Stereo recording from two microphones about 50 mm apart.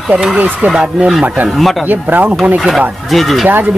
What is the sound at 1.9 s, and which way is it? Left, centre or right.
Speech, right.